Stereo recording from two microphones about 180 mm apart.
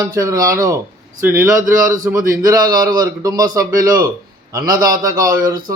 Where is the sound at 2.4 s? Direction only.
20° right (ahead or behind).